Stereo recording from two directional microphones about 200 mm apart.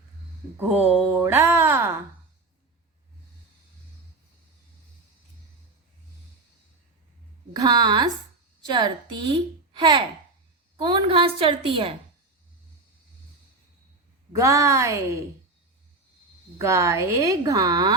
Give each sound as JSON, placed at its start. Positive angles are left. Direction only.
{"t": 0.5, "sound": "speech", "side_deg": -10}
{"t": 7.5, "sound": "a woman's voice", "side_deg": -20}
{"t": 14.3, "sound": "speech", "side_deg": -15}
{"t": 16.6, "sound": "speech", "side_deg": -15}